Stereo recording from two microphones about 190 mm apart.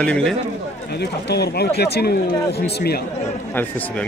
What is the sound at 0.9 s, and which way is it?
Speech, 60° left (ahead or behind).